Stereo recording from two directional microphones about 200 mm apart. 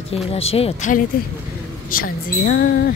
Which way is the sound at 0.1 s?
30° left (ahead or behind).